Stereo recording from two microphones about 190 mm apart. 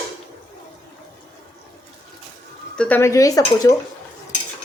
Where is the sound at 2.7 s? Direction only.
10° left (ahead or behind).